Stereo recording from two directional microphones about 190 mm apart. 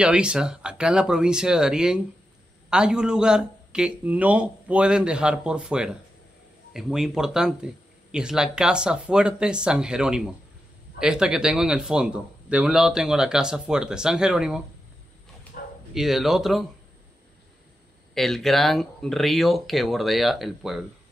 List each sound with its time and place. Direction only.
0.0 s speech: 5° right (ahead or behind)
15.5 s bow-wow: 50° left (ahead or behind)
15.9 s speech: centre (ahead or behind)
18.1 s speech: centre (ahead or behind)